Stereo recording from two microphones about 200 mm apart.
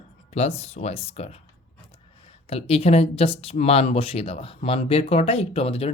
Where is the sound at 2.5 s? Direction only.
30° left (ahead or behind).